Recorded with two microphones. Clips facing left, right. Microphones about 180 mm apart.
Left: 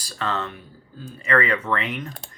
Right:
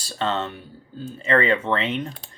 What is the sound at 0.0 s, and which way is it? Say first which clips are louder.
Speech: right 3 dB; 25° right (ahead or behind).